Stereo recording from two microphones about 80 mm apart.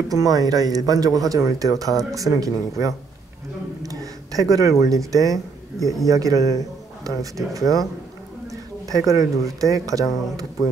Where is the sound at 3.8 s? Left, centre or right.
Right.